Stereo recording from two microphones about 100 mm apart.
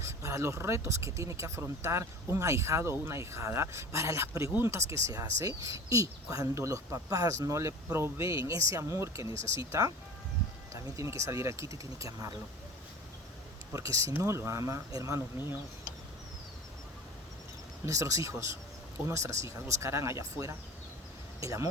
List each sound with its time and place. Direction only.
0.0 s speech: 30° right (ahead or behind)
13.7 s speech: 30° right (ahead or behind)
17.8 s speech: 30° right (ahead or behind)